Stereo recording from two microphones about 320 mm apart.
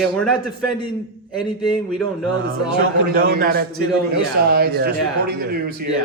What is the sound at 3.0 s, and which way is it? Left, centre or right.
Speech, right.